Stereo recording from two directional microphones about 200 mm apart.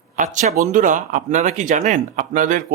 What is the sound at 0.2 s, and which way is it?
Speech, 40° right (ahead or behind).